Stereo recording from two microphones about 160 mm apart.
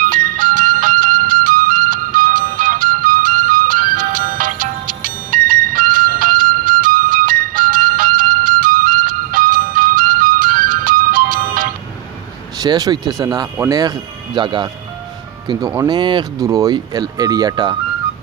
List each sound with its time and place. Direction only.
0.0 s music: 60° right (ahead or behind)
12.5 s speech: 25° right (ahead or behind)